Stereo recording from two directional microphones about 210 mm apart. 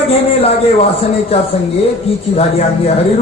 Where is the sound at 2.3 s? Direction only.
30° left (ahead or behind).